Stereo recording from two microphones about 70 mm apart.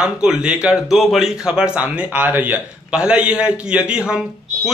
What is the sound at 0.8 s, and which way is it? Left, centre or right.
Speech, centre.